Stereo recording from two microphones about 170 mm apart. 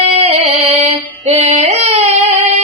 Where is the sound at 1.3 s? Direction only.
40° right (ahead or behind).